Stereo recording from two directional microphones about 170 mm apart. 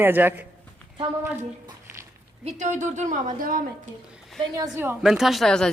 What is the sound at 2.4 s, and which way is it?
A woman's voice, 45° right (ahead or behind).